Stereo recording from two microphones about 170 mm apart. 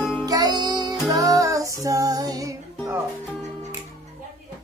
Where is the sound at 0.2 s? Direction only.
25° right (ahead or behind).